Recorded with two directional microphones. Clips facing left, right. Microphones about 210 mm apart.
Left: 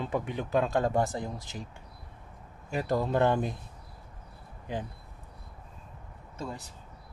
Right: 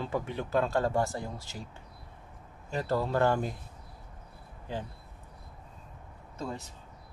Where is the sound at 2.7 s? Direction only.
15° left (ahead or behind).